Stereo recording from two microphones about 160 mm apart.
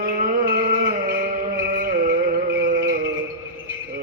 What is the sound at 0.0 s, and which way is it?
Music, 55° right (ahead or behind).